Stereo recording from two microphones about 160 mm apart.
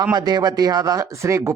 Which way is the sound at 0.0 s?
25° right (ahead or behind).